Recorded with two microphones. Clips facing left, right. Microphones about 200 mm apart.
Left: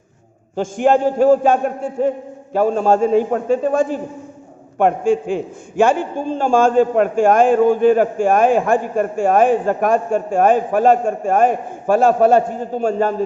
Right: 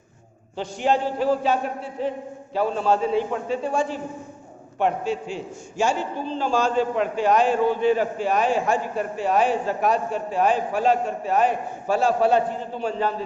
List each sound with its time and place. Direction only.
0.5 s a man's voice: 50° left (ahead or behind)